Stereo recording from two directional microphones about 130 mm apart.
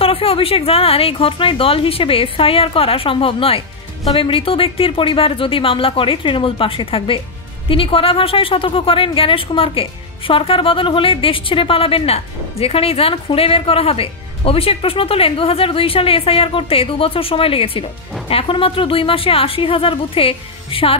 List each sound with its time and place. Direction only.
0.0 s a woman's voice: 45° left (ahead or behind)